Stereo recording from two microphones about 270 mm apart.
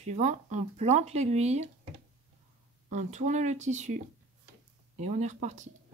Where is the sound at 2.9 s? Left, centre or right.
Right.